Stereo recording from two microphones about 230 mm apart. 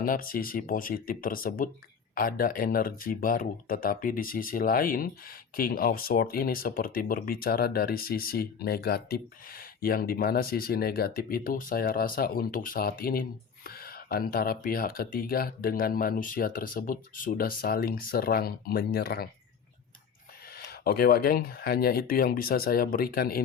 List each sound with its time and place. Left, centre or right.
0.0 s speech: left
20.6 s speech: left